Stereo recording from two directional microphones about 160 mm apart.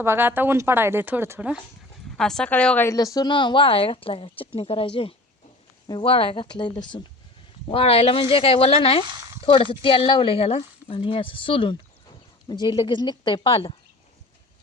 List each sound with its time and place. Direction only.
0.0 s speech: 15° right (ahead or behind)
2.1 s a woman's voice: 5° left (ahead or behind); by 13.7 s 35° left (ahead or behind)